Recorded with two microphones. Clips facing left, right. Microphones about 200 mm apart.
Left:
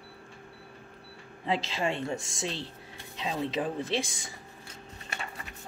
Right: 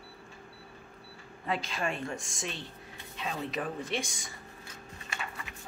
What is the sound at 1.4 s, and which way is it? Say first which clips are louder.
Speech: left 3 dB; 25° left (ahead or behind).